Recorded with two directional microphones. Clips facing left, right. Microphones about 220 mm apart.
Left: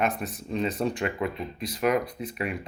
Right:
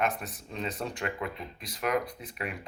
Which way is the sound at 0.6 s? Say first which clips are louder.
Left 6 dB; 15° left (ahead or behind).